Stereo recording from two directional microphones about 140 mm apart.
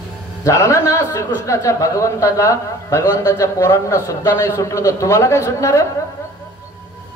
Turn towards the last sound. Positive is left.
turn(degrees=20)  # may be behind; listen again after turning